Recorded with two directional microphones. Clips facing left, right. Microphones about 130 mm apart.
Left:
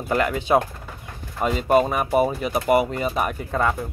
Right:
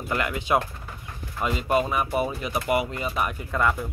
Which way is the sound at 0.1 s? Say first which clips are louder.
Left 5 dB; 35° left (ahead or behind).